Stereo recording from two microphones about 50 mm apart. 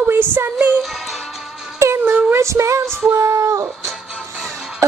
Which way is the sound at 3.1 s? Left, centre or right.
Right.